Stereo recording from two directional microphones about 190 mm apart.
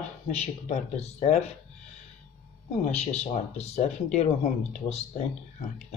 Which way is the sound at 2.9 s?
35° left (ahead or behind).